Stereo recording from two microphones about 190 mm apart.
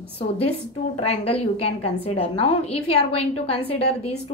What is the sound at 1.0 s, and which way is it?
A woman's voice, 30° left (ahead or behind).